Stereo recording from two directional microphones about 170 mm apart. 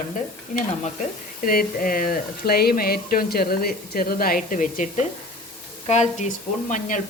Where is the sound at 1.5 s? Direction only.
55° left (ahead or behind).